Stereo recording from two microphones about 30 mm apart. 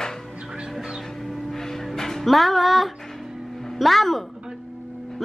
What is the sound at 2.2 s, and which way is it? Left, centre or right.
Music, centre.